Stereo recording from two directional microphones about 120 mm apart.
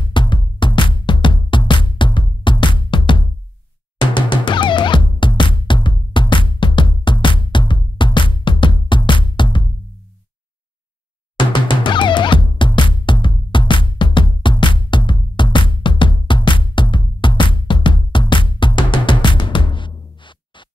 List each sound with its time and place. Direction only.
0.0 s music: 40° left (ahead or behind)
11.3 s music: 45° left (ahead or behind)